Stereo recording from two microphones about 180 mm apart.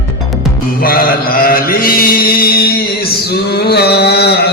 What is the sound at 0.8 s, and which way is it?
Mantra, 55° left (ahead or behind).